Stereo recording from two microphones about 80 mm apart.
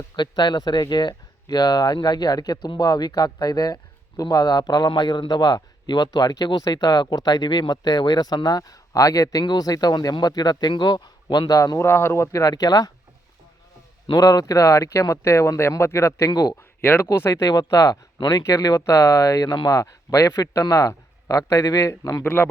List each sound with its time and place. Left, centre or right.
0.2 s speech: left
5.3 s speech: left
11.8 s speech: left
14.1 s speech: left
16.3 s speech: left
16.8 s speech: left
17.1 s speech: left
18.4 s speech: left